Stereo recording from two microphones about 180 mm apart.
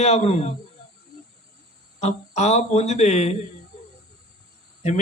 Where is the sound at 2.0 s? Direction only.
40° left (ahead or behind).